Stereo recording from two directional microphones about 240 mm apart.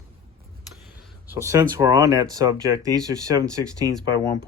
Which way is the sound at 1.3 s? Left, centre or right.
Centre.